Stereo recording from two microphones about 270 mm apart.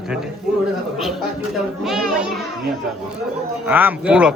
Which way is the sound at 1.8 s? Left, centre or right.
Centre.